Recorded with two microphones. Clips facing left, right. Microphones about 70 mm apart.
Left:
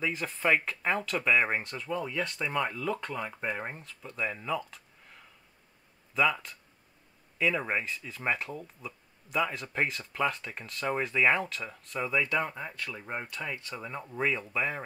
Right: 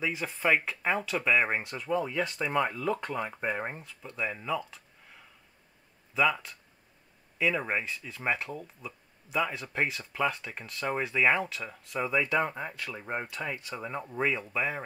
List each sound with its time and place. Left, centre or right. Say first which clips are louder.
0.0 s speech: even; centre